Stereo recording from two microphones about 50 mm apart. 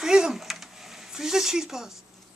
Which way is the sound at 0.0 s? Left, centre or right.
Centre.